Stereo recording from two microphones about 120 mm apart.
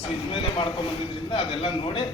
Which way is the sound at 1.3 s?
45° left (ahead or behind).